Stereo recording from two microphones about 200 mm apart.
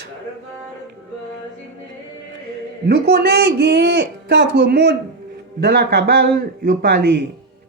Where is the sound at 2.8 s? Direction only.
55° right (ahead or behind).